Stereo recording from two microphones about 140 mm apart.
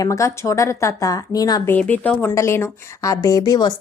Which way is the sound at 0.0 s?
20° left (ahead or behind).